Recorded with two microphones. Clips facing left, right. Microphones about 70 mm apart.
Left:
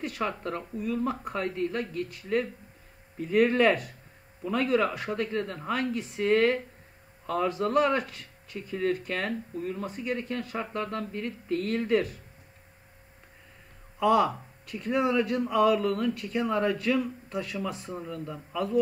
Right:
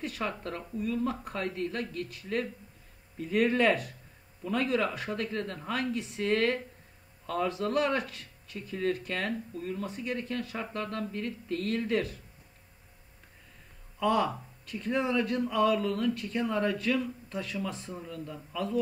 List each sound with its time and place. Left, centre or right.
0.0 s speech: centre
9.5 s speech: centre
9.8 s speech: centre
10.1 s speech: centre
13.9 s speech: centre